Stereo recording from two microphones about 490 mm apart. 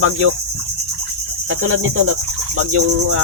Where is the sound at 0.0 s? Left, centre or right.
Right.